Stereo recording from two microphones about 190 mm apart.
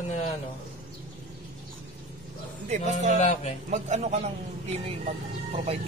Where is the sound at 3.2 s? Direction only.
35° left (ahead or behind).